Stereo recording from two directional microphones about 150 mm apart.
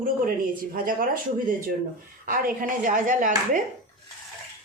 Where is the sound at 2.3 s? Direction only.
60° right (ahead or behind).